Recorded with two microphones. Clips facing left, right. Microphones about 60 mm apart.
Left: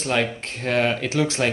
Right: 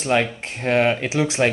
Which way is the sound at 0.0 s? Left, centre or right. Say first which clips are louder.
Right 3 dB; centre.